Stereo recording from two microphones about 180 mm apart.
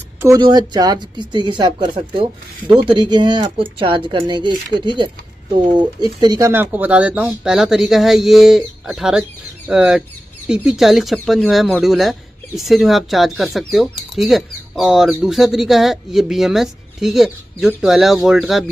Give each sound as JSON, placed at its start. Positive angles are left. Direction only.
{"t": 0.2, "sound": "speech", "side_deg": -20}
{"t": 6.5, "sound": "speech", "side_deg": -10}